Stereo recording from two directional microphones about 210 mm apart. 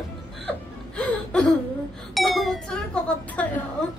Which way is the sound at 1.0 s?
5° left (ahead or behind).